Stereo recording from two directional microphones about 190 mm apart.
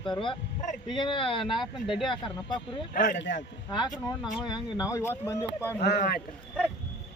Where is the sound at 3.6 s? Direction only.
20° left (ahead or behind).